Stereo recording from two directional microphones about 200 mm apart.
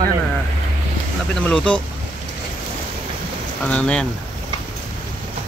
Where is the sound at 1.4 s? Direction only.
5° left (ahead or behind).